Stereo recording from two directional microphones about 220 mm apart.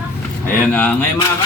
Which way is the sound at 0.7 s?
5° left (ahead or behind).